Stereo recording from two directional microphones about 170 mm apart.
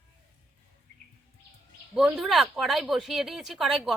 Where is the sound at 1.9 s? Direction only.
Centre (ahead or behind).